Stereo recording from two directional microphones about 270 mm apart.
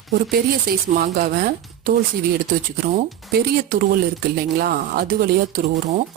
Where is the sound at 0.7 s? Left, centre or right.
Right.